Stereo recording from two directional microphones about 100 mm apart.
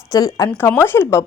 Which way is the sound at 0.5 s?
20° left (ahead or behind).